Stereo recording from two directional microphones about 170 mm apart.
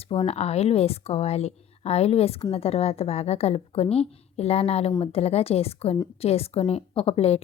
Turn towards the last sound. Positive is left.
turn(degrees=35)  # may be behind; listen again after turning